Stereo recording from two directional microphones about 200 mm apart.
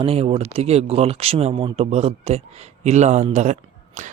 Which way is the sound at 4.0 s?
35° right (ahead or behind).